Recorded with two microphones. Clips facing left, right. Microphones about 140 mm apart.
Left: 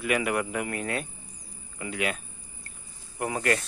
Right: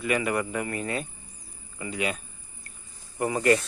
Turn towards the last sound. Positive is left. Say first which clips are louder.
# right 5 dB
turn(degrees=0)  # may be behind; listen again after turning